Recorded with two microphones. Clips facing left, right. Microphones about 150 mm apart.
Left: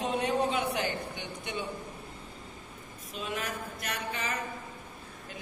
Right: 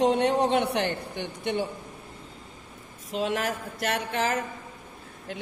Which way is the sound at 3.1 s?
90° right.